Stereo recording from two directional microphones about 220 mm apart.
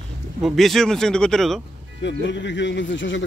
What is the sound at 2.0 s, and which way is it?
Speech, 55° left (ahead or behind).